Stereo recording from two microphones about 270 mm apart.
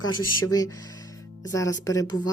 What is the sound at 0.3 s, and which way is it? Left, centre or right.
Speech, left.